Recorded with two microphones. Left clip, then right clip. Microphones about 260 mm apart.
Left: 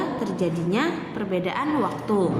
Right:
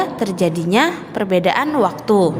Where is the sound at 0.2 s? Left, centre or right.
Right.